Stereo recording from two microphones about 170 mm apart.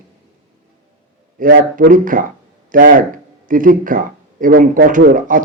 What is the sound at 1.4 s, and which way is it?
A man's voice, 55° right (ahead or behind).